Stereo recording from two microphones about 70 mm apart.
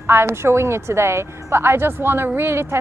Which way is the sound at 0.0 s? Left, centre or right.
Right.